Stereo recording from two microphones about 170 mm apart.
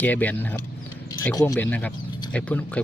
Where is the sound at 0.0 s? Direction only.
10° left (ahead or behind).